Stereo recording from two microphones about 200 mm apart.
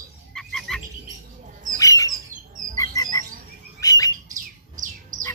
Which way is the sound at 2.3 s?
40° right (ahead or behind).